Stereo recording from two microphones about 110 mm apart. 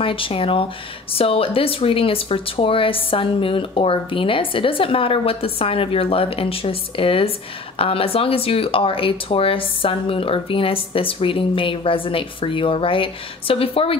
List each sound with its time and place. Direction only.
0.0 s speech: 55° left (ahead or behind)